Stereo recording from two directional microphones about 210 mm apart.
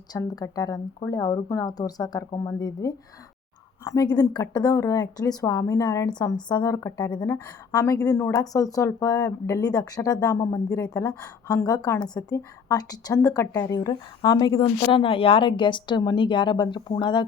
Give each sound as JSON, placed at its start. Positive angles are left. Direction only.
{"t": 0.1, "sound": "a woman's voice", "side_deg": 15}